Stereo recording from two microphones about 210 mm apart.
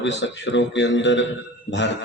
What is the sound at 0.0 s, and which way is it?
A man's voice, 60° left (ahead or behind).